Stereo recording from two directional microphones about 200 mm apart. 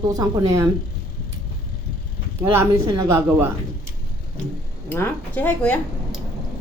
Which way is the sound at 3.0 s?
10° right (ahead or behind).